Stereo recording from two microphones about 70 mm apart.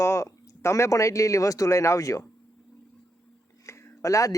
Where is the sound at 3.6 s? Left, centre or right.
Left.